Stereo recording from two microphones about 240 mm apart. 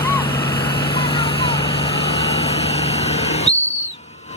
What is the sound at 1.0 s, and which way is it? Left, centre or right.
Vehicle, left.